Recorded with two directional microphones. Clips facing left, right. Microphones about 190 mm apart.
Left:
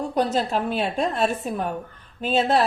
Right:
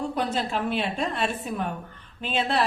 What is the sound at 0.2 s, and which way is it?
A woman's voice, 40° left (ahead or behind).